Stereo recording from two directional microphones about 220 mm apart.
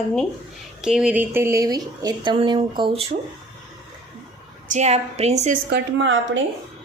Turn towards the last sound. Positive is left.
turn(degrees=-55)  # may be behind; listen again after turning